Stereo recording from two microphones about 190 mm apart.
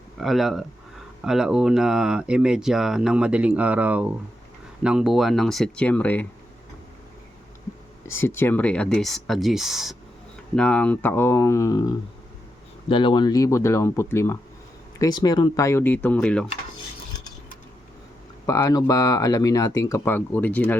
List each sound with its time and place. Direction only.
0.2 s speech: centre (ahead or behind)
8.2 s speech: 10° left (ahead or behind)
18.4 s speech: 15° left (ahead or behind)